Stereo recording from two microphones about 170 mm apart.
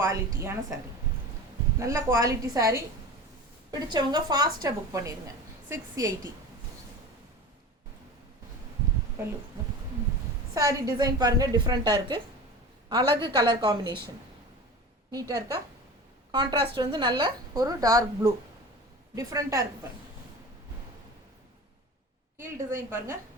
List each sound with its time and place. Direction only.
0.0 s a woman's voice: 15° right (ahead or behind)
1.8 s a woman's voice: 20° right (ahead or behind)
10.5 s a woman's voice: 20° right (ahead or behind)
15.1 s a woman's voice: 20° right (ahead or behind)
22.4 s a woman's voice: 15° right (ahead or behind)